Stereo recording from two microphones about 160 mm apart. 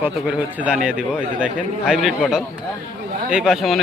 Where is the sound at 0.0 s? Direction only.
10° right (ahead or behind).